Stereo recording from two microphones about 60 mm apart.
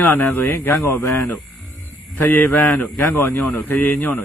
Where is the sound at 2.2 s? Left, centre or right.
Left.